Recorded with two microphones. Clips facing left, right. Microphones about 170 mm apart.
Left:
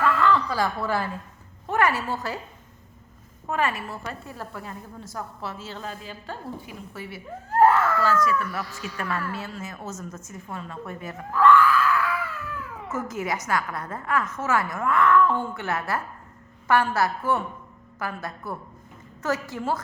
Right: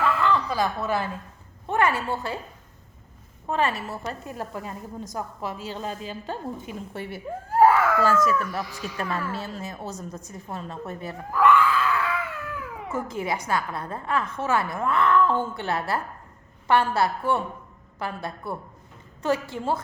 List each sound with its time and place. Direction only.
0.0 s a sound: 15° right (ahead or behind)
1.6 s a woman's voice: 25° right (ahead or behind)
3.5 s a woman's voice: 35° right (ahead or behind)
3.8 s a woman's voice: 15° right (ahead or behind)
6.9 s speech: 60° right (ahead or behind)
7.5 s baby cry: 10° right (ahead or behind)
8.2 s a woman's voice: 40° right (ahead or behind)
8.5 s a woman's voice: 15° right (ahead or behind)
9.3 s a woman's voice: 35° right (ahead or behind)
11.3 s screaming: 10° right (ahead or behind)
12.9 s a woman's voice: 30° right (ahead or behind)